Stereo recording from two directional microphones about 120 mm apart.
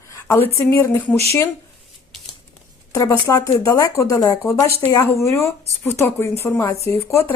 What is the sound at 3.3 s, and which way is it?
A woman's voice, 25° left (ahead or behind).